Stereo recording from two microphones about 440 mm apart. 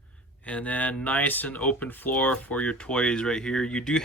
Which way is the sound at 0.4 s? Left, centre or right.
Centre.